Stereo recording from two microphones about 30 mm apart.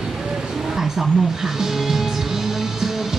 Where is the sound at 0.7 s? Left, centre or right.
Centre.